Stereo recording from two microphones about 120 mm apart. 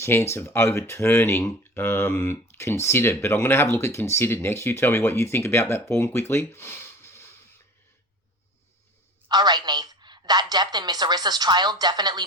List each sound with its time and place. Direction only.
0.0 s speech: 25° left (ahead or behind)
9.3 s a woman's voice: 35° right (ahead or behind)